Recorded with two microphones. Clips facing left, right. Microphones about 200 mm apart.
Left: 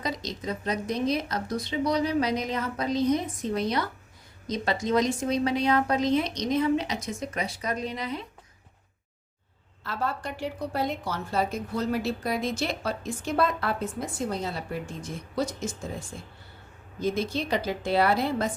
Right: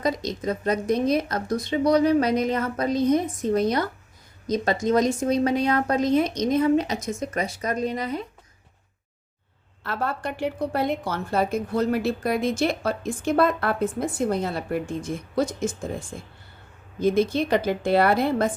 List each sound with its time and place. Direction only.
0.0 s speech: 50° right (ahead or behind)
9.8 s a woman's voice: 60° right (ahead or behind)